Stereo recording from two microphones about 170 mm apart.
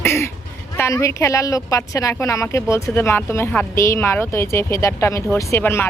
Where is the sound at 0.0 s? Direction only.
15° left (ahead or behind).